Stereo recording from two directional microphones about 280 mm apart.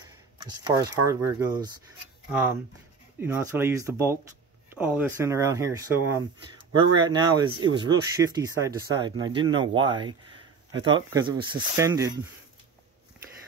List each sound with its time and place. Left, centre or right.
0.4 s speech: centre